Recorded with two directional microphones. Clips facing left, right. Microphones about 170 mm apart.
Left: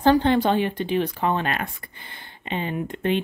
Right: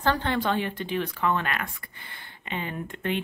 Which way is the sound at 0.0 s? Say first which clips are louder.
Left 8 dB; 20° left (ahead or behind).